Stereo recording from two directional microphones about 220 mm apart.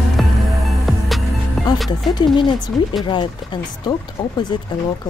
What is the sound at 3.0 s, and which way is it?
A woman's voice, 20° left (ahead or behind).